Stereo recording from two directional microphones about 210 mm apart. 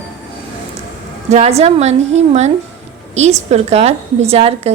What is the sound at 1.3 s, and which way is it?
A woman's voice, 30° right (ahead or behind).